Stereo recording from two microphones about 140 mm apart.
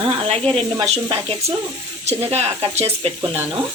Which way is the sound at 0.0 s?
45° right (ahead or behind).